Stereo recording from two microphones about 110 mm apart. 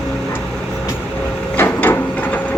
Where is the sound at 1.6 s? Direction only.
20° left (ahead or behind).